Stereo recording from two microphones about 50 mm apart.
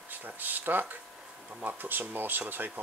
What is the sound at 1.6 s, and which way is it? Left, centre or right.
Speech, right.